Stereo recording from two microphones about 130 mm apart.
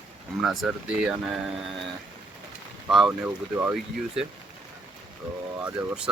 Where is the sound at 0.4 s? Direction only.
Centre (ahead or behind).